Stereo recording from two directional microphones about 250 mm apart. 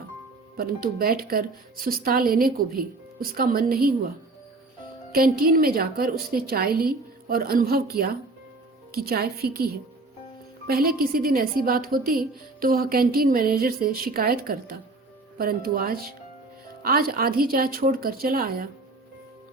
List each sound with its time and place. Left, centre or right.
0.5 s a woman's voice: right
5.1 s a woman's voice: right
10.7 s a woman's voice: right